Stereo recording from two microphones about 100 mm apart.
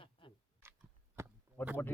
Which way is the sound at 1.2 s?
25° right (ahead or behind).